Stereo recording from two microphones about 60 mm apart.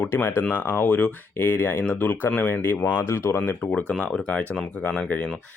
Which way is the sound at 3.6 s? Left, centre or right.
Centre.